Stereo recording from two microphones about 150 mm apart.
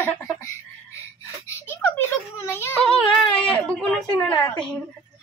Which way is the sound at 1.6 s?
15° left (ahead or behind).